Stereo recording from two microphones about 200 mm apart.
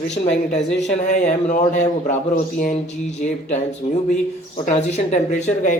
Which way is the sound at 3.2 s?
35° left (ahead or behind).